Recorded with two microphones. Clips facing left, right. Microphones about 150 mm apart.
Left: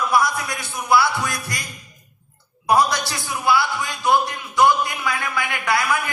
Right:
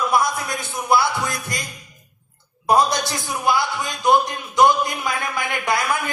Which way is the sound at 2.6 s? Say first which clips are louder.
Right 1 dB; 20° right (ahead or behind).